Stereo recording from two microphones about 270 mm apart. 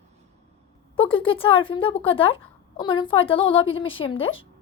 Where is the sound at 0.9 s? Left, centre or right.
Centre.